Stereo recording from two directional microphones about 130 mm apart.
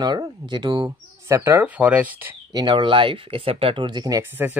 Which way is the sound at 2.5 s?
35° right (ahead or behind).